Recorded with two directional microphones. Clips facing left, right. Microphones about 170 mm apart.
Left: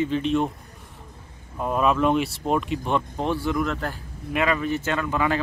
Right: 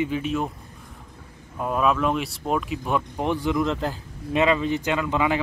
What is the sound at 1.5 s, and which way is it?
Speech, centre (ahead or behind).